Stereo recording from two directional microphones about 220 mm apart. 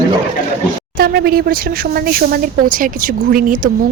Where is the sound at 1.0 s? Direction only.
45° right (ahead or behind).